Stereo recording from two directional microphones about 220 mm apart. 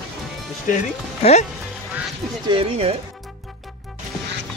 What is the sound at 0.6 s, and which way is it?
Speech, 30° left (ahead or behind).